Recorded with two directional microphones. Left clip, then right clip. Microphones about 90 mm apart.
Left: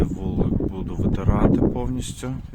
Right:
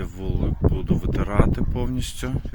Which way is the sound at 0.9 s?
35° left (ahead or behind).